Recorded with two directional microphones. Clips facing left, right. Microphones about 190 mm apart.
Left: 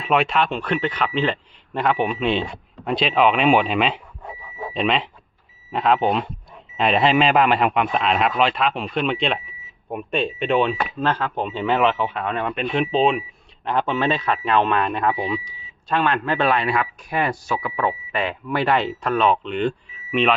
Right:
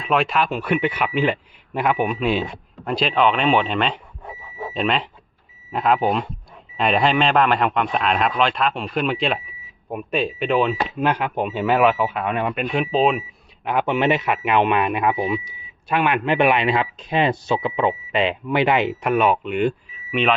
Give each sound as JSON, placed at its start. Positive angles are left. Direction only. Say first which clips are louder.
{"t": 0.0, "sound": "speech", "louder": "even", "side_deg": 0}
{"t": 10.8, "sound": "speech", "louder": "right 1 dB", "side_deg": -15}